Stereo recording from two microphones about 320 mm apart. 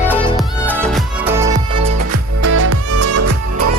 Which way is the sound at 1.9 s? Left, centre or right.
Right.